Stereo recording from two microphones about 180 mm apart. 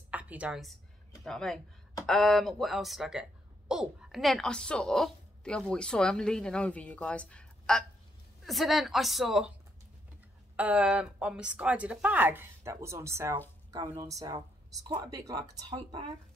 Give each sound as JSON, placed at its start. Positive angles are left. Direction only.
{"t": 0.1, "sound": "a woman's voice", "side_deg": -10}
{"t": 10.5, "sound": "speech", "side_deg": -5}